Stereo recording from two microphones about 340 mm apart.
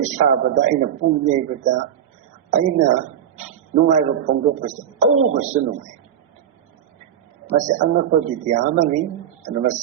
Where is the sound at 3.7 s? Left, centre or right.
Right.